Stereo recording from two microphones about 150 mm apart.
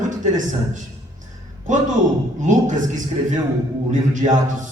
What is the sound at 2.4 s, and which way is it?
A man's voice, 55° right (ahead or behind).